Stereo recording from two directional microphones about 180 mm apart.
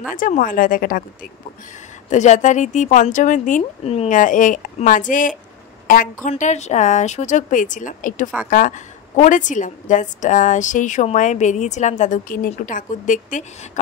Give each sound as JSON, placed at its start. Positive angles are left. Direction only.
{"t": 0.1, "sound": "a woman's voice", "side_deg": 50}
{"t": 2.0, "sound": "a woman's voice", "side_deg": 40}